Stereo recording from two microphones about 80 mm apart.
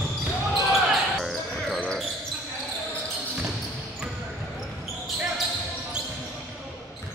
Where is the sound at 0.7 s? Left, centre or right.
Centre.